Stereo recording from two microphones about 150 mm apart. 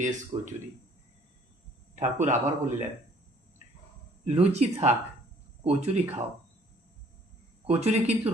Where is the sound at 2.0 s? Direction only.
55° right (ahead or behind).